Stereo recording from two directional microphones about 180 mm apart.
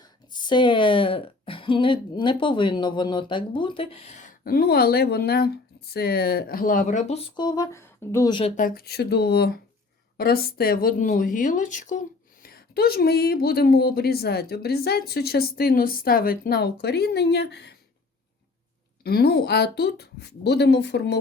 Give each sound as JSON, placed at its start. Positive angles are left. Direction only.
{"t": 0.0, "sound": "a woman's voice", "side_deg": 25}
{"t": 7.3, "sound": "a woman's voice", "side_deg": 25}
{"t": 8.3, "sound": "a woman's voice", "side_deg": 30}
{"t": 8.5, "sound": "speech", "side_deg": 50}
{"t": 19.0, "sound": "speech", "side_deg": 60}